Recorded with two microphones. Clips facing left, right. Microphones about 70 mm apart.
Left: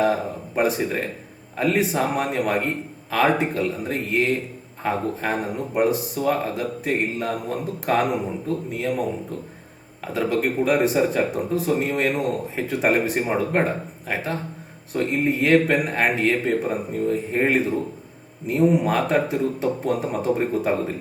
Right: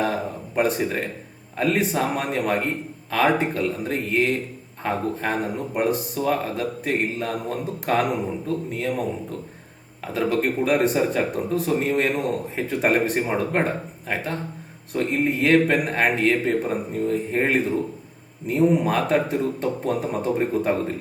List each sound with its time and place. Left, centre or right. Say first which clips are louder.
0.0 s speech: left 3 dB; centre